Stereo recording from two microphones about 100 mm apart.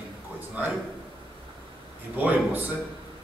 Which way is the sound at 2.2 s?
15° right (ahead or behind).